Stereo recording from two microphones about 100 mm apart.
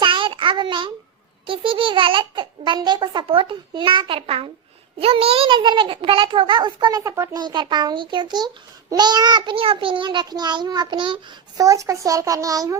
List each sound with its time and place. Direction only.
0.0 s child singing: 55° right (ahead or behind)
1.5 s a child's voice: 60° right (ahead or behind)
4.9 s a child's voice: 75° right (ahead or behind)
5.5 s a child's voice: 55° right (ahead or behind)
9.6 s a child's voice: 60° right (ahead or behind)
11.5 s a child's voice: 35° right (ahead or behind)